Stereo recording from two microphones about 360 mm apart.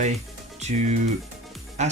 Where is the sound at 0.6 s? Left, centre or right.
Centre.